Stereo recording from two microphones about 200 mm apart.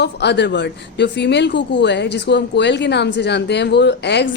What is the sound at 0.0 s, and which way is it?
Speech, 60° left (ahead or behind).